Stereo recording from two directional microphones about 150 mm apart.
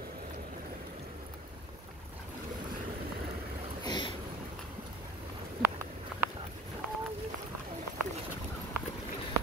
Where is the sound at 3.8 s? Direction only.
30° left (ahead or behind).